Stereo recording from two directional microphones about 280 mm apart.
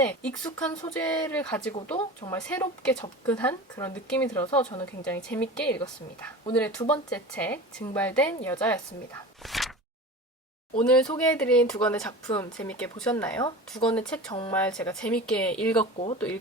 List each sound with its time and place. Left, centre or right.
0.0 s speech: centre
9.4 s a sound: centre
10.8 s speech: centre
15.8 s speech: centre